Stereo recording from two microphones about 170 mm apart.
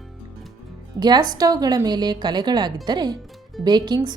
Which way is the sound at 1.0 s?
25° right (ahead or behind).